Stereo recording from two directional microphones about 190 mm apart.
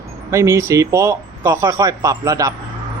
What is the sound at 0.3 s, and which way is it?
Speech, 15° right (ahead or behind).